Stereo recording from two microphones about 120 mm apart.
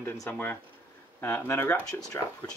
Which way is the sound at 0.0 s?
20° left (ahead or behind).